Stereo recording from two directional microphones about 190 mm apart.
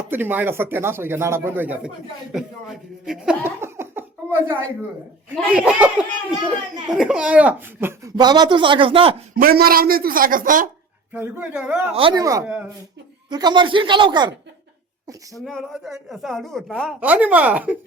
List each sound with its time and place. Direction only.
0.1 s a woman's voice: 10° right (ahead or behind)
3.4 s a sound: 10° right (ahead or behind)
5.3 s speech: 5° right (ahead or behind)
6.9 s speech: 5° right (ahead or behind)
8.1 s a man's voice: 20° right (ahead or behind)
9.3 s a woman's voice: 50° right (ahead or behind)
11.1 s speech: 10° right (ahead or behind)
11.9 s a man's voice: 25° right (ahead or behind)
15.4 s a woman's voice: centre (ahead or behind)